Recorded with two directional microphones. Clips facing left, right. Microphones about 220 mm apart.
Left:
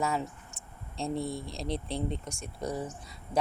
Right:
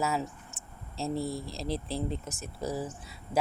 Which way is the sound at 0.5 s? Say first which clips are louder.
Even; 5° right (ahead or behind).